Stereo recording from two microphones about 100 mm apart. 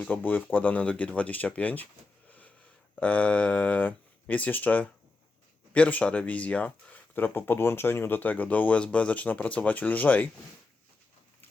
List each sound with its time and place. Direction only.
0.0 s speech: 15° left (ahead or behind)
2.9 s speech: 15° left (ahead or behind)